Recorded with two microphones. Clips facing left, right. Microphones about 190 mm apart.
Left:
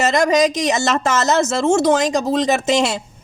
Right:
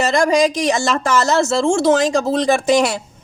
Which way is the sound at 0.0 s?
20° left (ahead or behind).